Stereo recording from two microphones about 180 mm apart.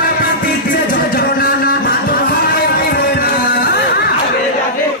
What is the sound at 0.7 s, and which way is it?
Music, 50° left (ahead or behind).